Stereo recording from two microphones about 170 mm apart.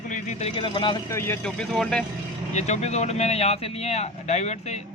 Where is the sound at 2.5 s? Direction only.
40° left (ahead or behind).